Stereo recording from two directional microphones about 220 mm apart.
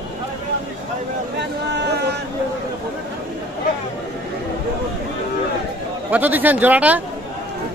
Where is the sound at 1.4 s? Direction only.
50° right (ahead or behind).